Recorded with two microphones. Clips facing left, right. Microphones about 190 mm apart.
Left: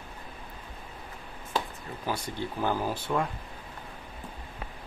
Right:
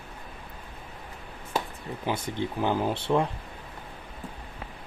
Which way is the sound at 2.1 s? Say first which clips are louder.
Right 3 dB; 20° right (ahead or behind).